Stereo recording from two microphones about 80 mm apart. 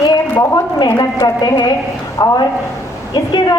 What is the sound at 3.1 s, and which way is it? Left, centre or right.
Speech, left.